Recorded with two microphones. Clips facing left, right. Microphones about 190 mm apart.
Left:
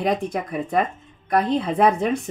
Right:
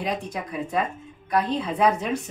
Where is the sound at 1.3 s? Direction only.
55° left (ahead or behind).